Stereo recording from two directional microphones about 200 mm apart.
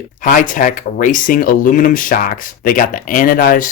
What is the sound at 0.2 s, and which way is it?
Speech, 45° left (ahead or behind).